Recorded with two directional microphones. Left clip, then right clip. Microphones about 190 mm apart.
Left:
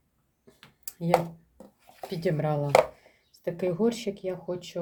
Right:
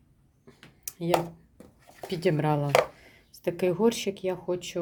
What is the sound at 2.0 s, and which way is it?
Speech, 30° right (ahead or behind).